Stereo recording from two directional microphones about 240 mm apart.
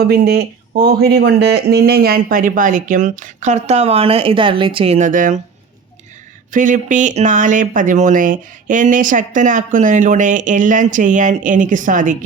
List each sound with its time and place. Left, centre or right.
0.0 s speech: right
6.5 s speech: right